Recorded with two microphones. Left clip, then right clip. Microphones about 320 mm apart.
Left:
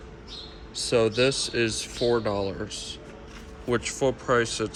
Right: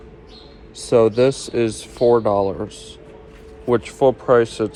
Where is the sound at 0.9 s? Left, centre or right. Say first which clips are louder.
Right 8 dB; centre.